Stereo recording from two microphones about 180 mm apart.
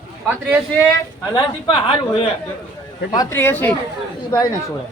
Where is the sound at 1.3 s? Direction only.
25° left (ahead or behind).